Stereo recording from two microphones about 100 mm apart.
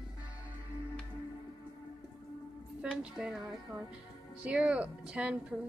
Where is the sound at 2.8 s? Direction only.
5° right (ahead or behind).